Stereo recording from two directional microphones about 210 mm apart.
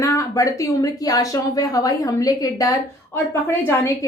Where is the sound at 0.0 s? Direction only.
15° left (ahead or behind).